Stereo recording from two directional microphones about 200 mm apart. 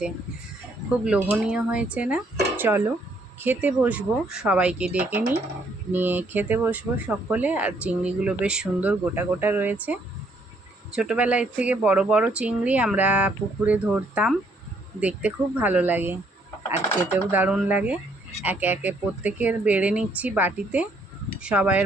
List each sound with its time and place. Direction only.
1.0 s speech: 5° right (ahead or behind)
17.3 s speech: 10° right (ahead or behind)